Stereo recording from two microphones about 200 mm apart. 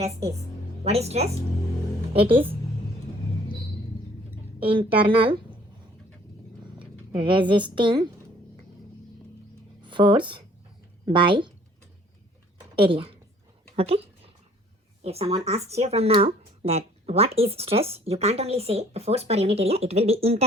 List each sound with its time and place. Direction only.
0.9 s speech: 30° right (ahead or behind)
2.3 s a woman's voice: 10° right (ahead or behind)
4.6 s a woman's voice: 25° right (ahead or behind)
7.1 s a woman's voice: 25° right (ahead or behind)
9.8 s speech: 25° right (ahead or behind)
12.8 s a woman's voice: 25° right (ahead or behind)
15.0 s speech: 30° right (ahead or behind)